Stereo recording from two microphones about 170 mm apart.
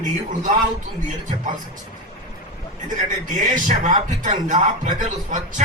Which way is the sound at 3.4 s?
50° right (ahead or behind).